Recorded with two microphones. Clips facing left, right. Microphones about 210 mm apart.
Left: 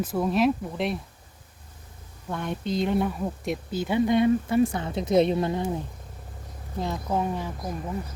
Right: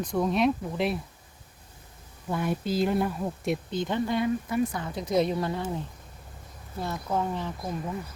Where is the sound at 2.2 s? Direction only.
5° right (ahead or behind); by 5.7 s 20° left (ahead or behind).